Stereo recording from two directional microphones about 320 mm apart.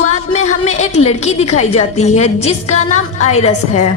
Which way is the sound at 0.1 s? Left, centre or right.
Left.